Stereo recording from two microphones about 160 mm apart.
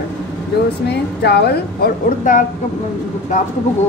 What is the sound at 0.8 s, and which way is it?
A woman's voice, 90° left.